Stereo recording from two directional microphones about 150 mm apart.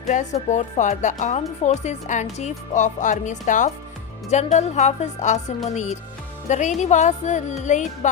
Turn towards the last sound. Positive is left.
turn(degrees=50)  # may be behind; listen again after turning